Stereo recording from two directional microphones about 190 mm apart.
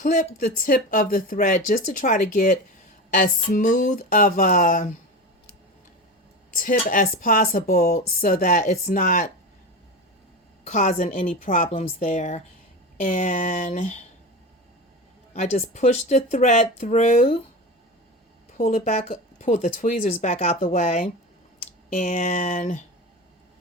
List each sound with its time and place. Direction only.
0.0 s speech: 40° left (ahead or behind)
6.6 s speech: 45° left (ahead or behind)
10.7 s speech: 40° left (ahead or behind)
15.3 s speech: 35° left (ahead or behind)
18.5 s speech: 45° left (ahead or behind)